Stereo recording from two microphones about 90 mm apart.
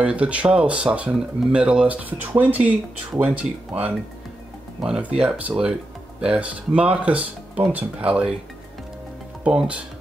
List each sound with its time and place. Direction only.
0.0 s speech: 15° right (ahead or behind)
9.4 s speech: 10° right (ahead or behind)